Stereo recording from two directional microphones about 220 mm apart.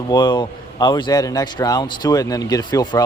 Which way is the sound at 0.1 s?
20° left (ahead or behind).